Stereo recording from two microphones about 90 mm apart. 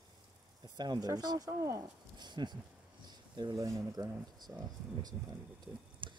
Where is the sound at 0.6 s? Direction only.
50° right (ahead or behind).